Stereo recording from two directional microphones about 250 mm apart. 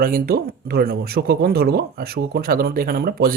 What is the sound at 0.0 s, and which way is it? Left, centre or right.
Speech, right.